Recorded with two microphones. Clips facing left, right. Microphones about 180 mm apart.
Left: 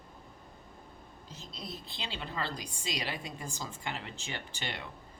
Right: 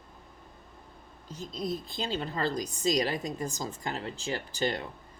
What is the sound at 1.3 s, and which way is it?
Speech, 45° right (ahead or behind).